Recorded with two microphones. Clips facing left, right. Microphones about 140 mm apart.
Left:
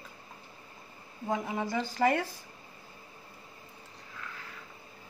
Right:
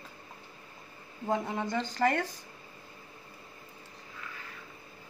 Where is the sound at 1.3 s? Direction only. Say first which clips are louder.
Right 1 dB; 5° left (ahead or behind).